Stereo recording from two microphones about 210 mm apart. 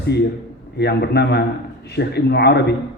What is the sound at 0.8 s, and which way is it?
A man's voice, 50° left (ahead or behind).